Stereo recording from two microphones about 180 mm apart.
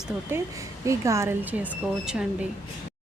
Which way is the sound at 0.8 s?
15° right (ahead or behind).